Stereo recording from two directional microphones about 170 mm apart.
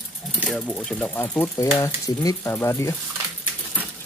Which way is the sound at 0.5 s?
Centre (ahead or behind).